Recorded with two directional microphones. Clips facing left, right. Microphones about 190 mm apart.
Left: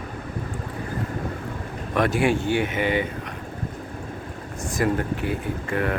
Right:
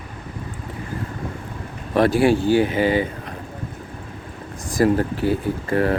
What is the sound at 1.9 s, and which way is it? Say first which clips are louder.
Speech: right 5 dB; 35° right (ahead or behind).